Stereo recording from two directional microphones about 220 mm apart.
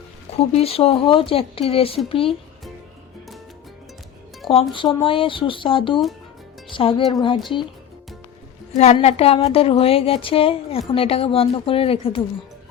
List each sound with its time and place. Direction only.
0.3 s speech: 25° left (ahead or behind)
4.7 s speech: 20° left (ahead or behind)
8.7 s speech: 30° left (ahead or behind)